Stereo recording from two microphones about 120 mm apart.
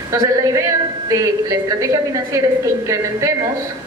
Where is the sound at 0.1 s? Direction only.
25° right (ahead or behind).